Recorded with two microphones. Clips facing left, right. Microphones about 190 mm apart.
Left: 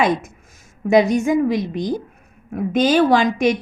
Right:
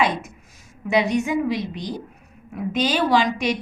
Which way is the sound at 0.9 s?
45° left (ahead or behind).